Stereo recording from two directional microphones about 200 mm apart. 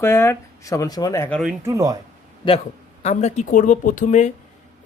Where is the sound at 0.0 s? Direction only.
10° left (ahead or behind).